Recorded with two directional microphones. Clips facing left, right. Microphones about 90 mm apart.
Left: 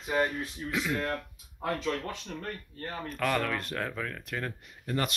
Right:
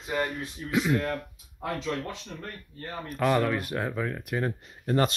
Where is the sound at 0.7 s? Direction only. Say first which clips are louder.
Right 6 dB; 15° right (ahead or behind).